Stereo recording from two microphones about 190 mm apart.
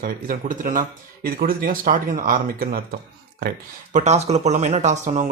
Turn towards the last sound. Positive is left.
turn(degrees=-40)  # may be behind; listen again after turning